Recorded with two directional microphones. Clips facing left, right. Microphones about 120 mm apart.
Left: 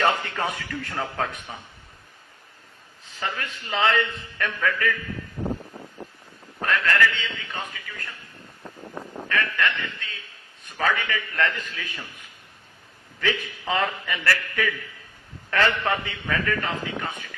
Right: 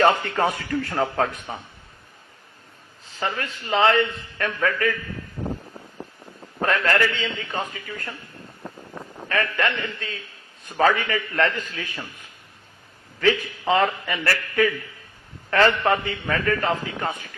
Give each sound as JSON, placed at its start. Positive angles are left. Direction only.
{"t": 0.0, "sound": "a man's voice", "side_deg": -35}
{"t": 3.2, "sound": "a man's voice", "side_deg": -35}
{"t": 6.6, "sound": "a man's voice", "side_deg": -35}
{"t": 9.3, "sound": "a man's voice", "side_deg": -35}
{"t": 13.1, "sound": "a man's voice", "side_deg": -35}